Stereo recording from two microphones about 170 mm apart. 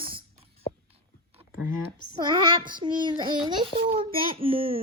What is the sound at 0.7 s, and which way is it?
Whispering, 40° left (ahead or behind).